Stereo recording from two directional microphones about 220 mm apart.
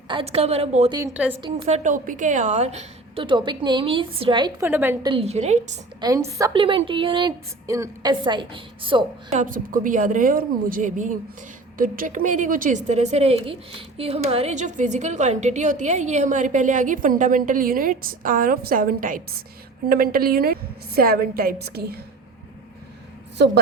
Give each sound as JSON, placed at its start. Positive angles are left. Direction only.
{"t": 0.1, "sound": "a woman's voice", "side_deg": -25}
{"t": 0.9, "sound": "a woman's voice", "side_deg": -10}
{"t": 1.4, "sound": "a woman's voice", "side_deg": -20}
{"t": 4.6, "sound": "a woman's voice", "side_deg": -10}
{"t": 5.0, "sound": "a woman's voice", "side_deg": -25}
{"t": 6.0, "sound": "a woman's voice", "side_deg": -15}